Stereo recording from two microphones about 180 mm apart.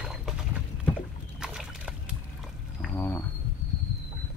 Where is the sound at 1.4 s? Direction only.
5° right (ahead or behind).